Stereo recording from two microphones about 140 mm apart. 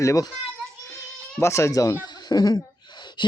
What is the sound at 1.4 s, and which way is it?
Speech, 20° left (ahead or behind).